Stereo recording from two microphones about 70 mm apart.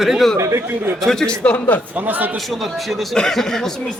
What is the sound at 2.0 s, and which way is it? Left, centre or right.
Speech, right.